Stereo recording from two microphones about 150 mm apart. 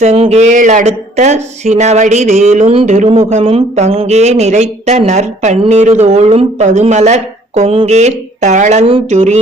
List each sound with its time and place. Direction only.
0.0 s speech: 45° right (ahead or behind)